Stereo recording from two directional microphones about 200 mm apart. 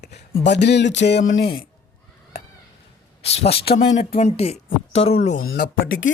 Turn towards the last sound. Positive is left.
turn(degrees=70)  # may be behind; listen again after turning